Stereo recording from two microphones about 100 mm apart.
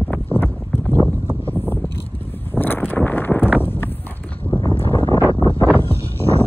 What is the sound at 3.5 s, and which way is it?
Horse, 20° left (ahead or behind).